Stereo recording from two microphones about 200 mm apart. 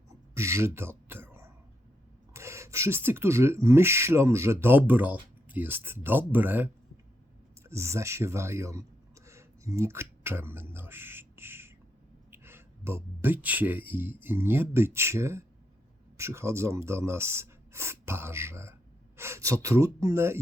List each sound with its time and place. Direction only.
0.3 s speech: 15° right (ahead or behind)